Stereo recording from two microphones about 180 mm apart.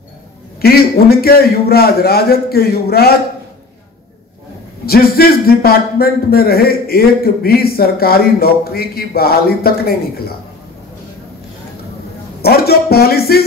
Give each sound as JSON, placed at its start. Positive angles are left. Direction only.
{"t": 0.6, "sound": "a man's voice", "side_deg": 60}
{"t": 4.8, "sound": "a man's voice", "side_deg": 60}
{"t": 12.4, "sound": "speech", "side_deg": 60}